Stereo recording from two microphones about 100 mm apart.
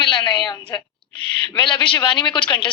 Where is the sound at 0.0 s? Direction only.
55° left (ahead or behind).